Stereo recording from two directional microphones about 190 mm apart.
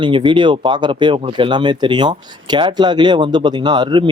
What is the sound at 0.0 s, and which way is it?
Speech, 25° right (ahead or behind).